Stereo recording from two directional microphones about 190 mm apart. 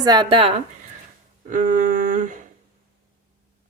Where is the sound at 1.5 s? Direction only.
45° right (ahead or behind).